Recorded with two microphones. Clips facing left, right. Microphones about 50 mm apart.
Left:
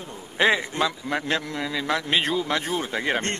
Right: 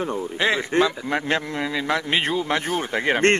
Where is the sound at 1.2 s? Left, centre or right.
Right.